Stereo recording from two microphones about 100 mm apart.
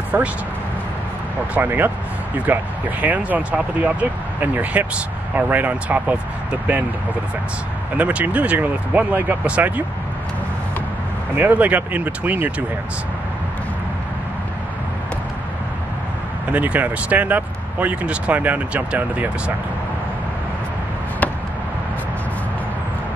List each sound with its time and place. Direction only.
0.1 s speech: 20° right (ahead or behind)
1.5 s speech: 20° right (ahead or behind)
8.0 s speech: 15° right (ahead or behind)
11.3 s speech: 15° right (ahead or behind)
16.5 s speech: 15° right (ahead or behind)